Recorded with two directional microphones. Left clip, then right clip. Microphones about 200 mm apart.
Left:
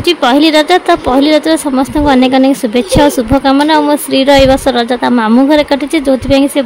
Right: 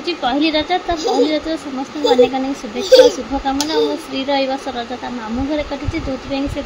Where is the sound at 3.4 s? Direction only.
40° left (ahead or behind).